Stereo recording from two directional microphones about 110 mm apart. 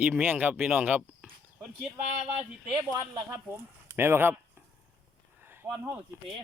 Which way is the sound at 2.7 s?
35° right (ahead or behind).